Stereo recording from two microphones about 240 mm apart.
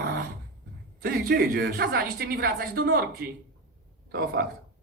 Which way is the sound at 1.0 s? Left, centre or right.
Right.